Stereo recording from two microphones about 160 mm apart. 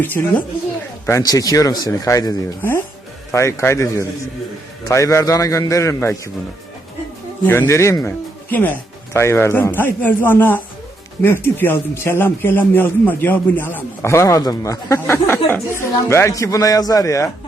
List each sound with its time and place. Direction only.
0.0 s a man's voice: 10° left (ahead or behind)
7.6 s a man's voice: 20° left (ahead or behind)